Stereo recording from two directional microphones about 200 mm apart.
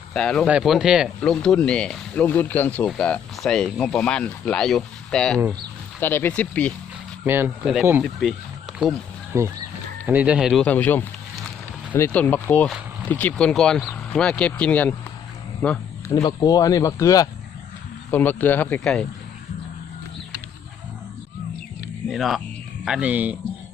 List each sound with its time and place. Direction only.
0.1 s speech: 5° left (ahead or behind)
7.3 s speech: 10° right (ahead or behind)
9.3 s speech: 15° right (ahead or behind); by 16.2 s 5° left (ahead or behind)
16.2 s speech: 20° left (ahead or behind)
22.1 s speech: centre (ahead or behind)